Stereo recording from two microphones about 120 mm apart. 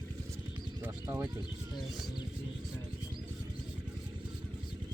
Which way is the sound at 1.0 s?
25° right (ahead or behind).